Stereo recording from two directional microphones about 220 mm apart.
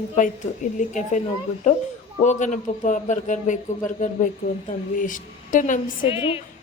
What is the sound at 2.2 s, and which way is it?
A man's voice, 35° left (ahead or behind).